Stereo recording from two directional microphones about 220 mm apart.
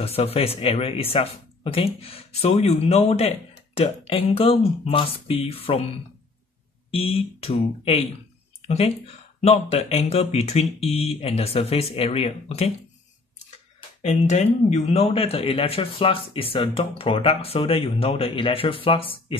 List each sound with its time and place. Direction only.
0.0 s speech: 25° left (ahead or behind)
6.9 s speech: 25° left (ahead or behind)
13.7 s speech: 30° left (ahead or behind)